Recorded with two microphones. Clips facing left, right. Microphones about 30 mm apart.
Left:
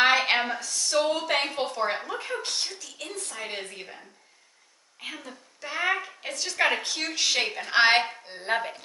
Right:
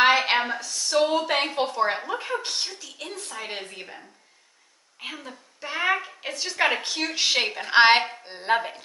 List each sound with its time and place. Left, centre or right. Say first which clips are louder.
0.2 s a sound: right 1 dB; centre
0.8 s a woman's voice: right 3 dB; centre
8.5 s a woman's voice: right 2 dB; centre